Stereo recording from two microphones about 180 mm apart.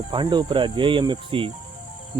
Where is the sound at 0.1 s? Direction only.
25° right (ahead or behind).